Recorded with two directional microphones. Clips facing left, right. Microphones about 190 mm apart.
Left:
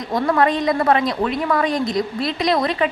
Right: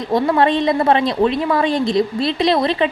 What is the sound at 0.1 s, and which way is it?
Speech, 25° right (ahead or behind).